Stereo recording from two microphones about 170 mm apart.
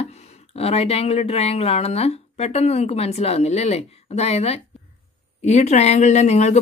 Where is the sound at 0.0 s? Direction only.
35° left (ahead or behind).